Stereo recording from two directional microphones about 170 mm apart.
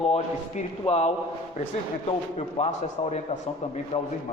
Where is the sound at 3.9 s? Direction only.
35° left (ahead or behind).